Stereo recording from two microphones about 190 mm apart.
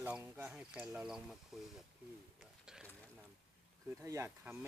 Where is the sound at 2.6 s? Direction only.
5° right (ahead or behind).